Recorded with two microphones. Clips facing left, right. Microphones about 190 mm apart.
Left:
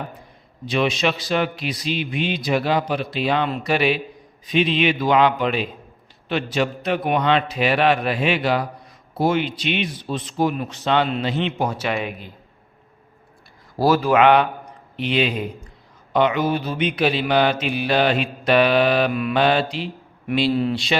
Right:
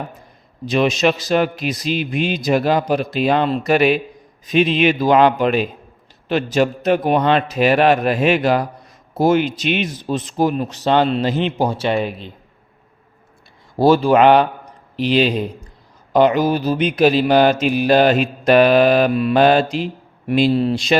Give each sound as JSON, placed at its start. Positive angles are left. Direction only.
{"t": 0.6, "sound": "mantra", "side_deg": -40}
{"t": 9.1, "sound": "speech", "side_deg": -45}
{"t": 13.7, "sound": "a man's voice", "side_deg": -25}
{"t": 16.9, "sound": "mantra", "side_deg": -40}